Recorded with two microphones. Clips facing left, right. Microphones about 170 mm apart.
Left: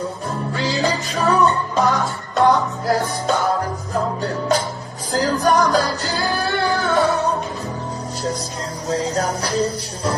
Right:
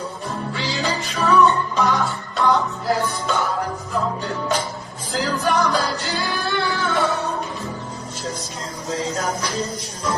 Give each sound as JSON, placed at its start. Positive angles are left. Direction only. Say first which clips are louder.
{"t": 0.8, "sound": "music", "louder": "left 1 dB", "side_deg": 40}
{"t": 8.9, "sound": "music", "louder": "left 3 dB", "side_deg": 35}